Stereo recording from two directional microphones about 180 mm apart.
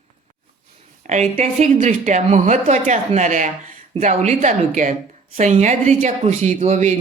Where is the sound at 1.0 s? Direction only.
40° right (ahead or behind).